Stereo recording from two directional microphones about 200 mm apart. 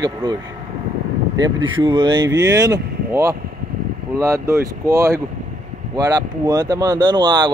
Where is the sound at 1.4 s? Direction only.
20° right (ahead or behind).